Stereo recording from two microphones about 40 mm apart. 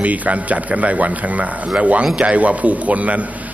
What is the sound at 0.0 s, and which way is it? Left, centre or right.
Speech, right.